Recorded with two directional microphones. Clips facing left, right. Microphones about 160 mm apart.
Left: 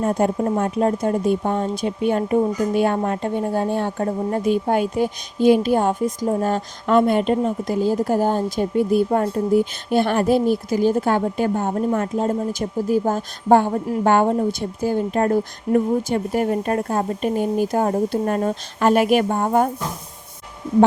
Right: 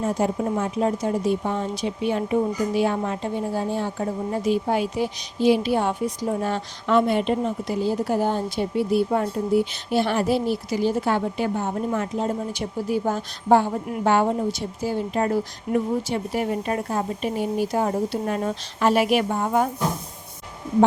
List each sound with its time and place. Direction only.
0.0 s a woman's voice: 55° left (ahead or behind)